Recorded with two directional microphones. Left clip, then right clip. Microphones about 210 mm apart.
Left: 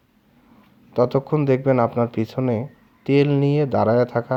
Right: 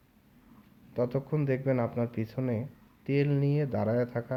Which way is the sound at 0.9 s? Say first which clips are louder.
Left 12 dB; 30° left (ahead or behind).